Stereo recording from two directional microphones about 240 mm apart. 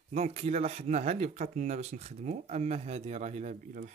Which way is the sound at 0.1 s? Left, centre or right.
Right.